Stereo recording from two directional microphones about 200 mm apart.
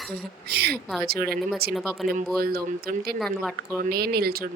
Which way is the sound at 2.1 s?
50° right (ahead or behind).